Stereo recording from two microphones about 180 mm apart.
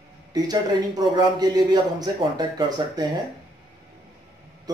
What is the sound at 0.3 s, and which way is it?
A man's voice, 20° right (ahead or behind).